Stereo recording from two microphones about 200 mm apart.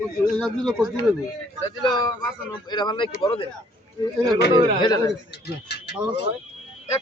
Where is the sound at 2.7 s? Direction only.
20° left (ahead or behind).